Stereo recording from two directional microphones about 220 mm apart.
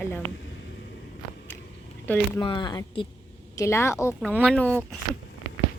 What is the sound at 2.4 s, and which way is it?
A woman's voice, 20° left (ahead or behind).